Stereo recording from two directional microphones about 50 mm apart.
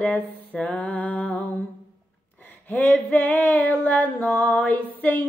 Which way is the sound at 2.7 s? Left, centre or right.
Left.